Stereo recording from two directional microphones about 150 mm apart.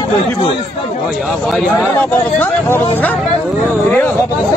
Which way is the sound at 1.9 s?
15° left (ahead or behind).